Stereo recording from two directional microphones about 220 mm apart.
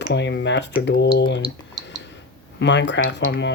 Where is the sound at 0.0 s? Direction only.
50° left (ahead or behind).